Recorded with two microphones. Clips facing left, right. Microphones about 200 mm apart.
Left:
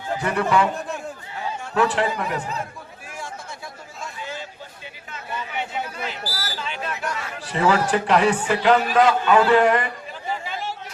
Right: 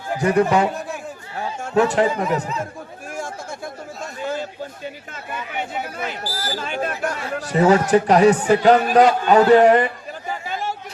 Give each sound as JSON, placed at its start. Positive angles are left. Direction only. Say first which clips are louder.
{"t": 0.2, "sound": "speech", "louder": "right 5 dB", "side_deg": -45}
{"t": 4.8, "sound": "a sound", "louder": "right 6 dB", "side_deg": -50}
{"t": 6.0, "sound": "a man's voice", "louder": "right 3 dB", "side_deg": -50}
{"t": 10.4, "sound": "chatter", "louder": "right 3 dB", "side_deg": -45}